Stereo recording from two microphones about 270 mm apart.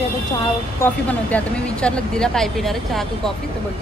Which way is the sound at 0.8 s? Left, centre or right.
Centre.